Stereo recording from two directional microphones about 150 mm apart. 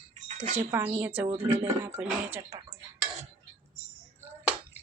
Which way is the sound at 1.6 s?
15° right (ahead or behind).